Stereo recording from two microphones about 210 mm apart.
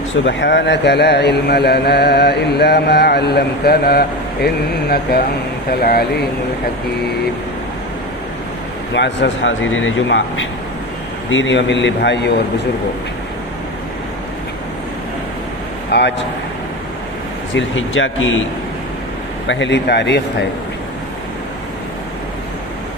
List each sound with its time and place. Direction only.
0.3 s speech: 55° left (ahead or behind)
9.0 s a man's voice: 55° left (ahead or behind)
15.9 s speech: 55° left (ahead or behind)
17.5 s speech: 65° left (ahead or behind)
19.5 s a man's voice: 60° left (ahead or behind)